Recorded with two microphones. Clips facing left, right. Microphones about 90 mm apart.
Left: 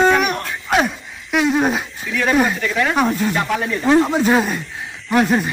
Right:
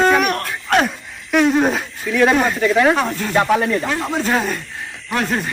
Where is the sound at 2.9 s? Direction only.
5° left (ahead or behind).